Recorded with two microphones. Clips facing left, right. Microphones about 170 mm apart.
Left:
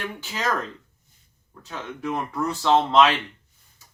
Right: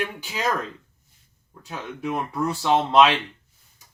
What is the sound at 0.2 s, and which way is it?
Speech, 15° right (ahead or behind).